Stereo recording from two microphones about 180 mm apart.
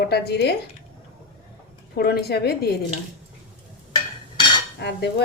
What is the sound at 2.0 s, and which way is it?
Speech, 60° left (ahead or behind).